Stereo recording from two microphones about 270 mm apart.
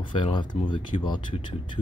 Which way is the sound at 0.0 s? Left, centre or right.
Centre.